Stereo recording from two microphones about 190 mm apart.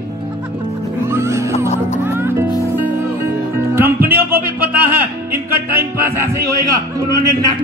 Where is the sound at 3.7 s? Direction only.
10° right (ahead or behind).